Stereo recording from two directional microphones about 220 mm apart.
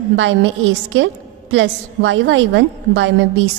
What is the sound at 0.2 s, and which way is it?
A woman's voice, 55° right (ahead or behind).